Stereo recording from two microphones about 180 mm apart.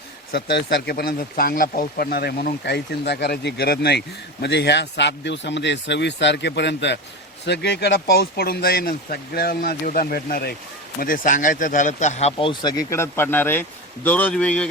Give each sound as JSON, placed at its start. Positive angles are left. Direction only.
{"t": 0.3, "sound": "speech", "side_deg": 60}